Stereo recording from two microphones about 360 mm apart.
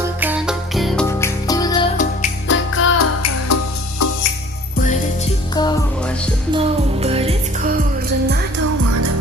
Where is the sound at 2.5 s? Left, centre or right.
Left.